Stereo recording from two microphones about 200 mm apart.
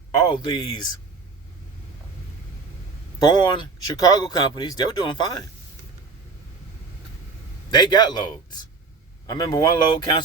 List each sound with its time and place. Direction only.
0.3 s speech: 20° left (ahead or behind)
3.2 s speech: 20° left (ahead or behind)
7.7 s speech: 20° left (ahead or behind)